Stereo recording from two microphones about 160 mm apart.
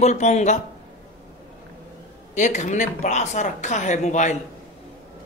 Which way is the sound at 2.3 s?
50° left (ahead or behind).